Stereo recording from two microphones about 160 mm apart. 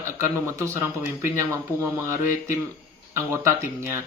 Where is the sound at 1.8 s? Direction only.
15° right (ahead or behind).